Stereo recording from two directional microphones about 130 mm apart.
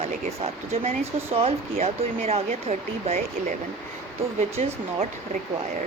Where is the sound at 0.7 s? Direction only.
55° right (ahead or behind).